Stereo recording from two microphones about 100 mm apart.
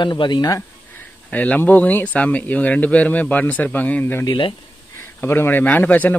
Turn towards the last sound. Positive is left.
turn(degrees=15)  # may be behind; listen again after turning